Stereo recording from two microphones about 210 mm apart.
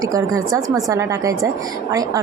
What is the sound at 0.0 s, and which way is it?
A woman's voice, 15° right (ahead or behind).